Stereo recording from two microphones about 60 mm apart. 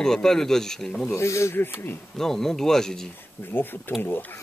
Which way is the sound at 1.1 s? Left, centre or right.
Left.